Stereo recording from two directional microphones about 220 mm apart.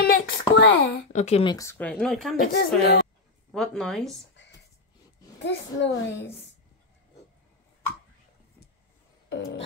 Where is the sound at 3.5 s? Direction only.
Centre (ahead or behind).